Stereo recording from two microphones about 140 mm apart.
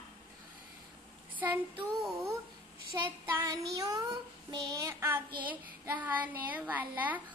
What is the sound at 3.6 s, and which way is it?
Child singing, 25° right (ahead or behind).